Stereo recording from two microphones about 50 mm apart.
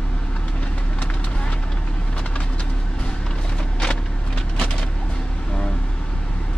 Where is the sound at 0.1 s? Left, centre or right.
Left.